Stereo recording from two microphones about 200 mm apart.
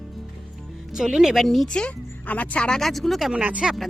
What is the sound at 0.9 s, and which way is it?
Speech, 5° right (ahead or behind).